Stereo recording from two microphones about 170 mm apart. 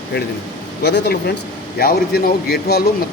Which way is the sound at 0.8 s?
75° left (ahead or behind).